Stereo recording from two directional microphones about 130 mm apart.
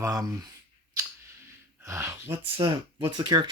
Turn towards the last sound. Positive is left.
turn(degrees=-30)  # may be behind; listen again after turning